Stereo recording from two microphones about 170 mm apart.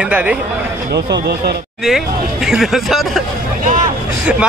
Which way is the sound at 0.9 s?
75° right (ahead or behind).